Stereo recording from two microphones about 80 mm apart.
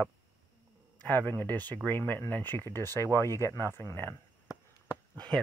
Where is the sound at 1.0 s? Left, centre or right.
Left.